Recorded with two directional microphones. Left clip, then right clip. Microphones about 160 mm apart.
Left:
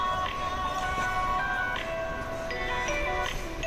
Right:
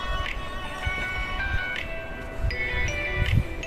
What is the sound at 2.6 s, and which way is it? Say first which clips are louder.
Music: right 2 dB; 20° right (ahead or behind).